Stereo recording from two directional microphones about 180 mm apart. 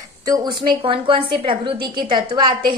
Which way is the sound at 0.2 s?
20° right (ahead or behind).